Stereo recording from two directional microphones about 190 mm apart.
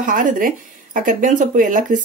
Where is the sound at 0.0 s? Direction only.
45° right (ahead or behind).